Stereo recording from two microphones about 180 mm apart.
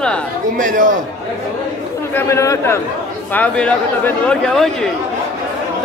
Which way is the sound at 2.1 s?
15° left (ahead or behind).